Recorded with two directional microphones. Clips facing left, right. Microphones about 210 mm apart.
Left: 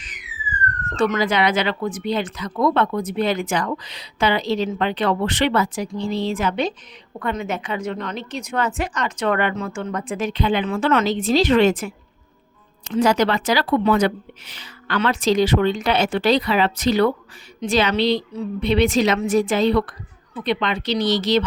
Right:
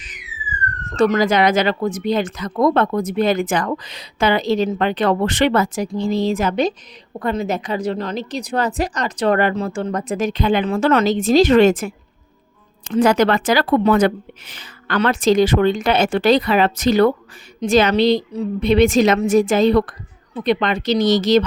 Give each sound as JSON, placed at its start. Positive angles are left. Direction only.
{"t": 0.9, "sound": "a woman's voice", "side_deg": -40}